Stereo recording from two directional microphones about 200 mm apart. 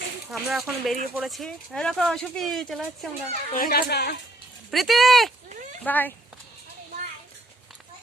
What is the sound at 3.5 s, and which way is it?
Speech, 45° left (ahead or behind).